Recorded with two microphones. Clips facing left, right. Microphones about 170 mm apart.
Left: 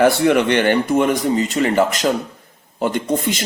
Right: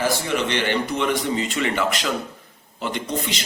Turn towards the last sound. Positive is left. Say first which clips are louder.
# left 7 dB
turn(degrees=50)  # may be behind; listen again after turning